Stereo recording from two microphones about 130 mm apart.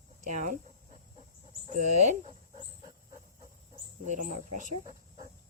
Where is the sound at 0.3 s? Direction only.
75° right (ahead or behind).